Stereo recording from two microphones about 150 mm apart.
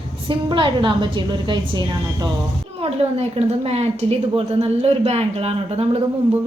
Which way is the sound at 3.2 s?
45° right (ahead or behind).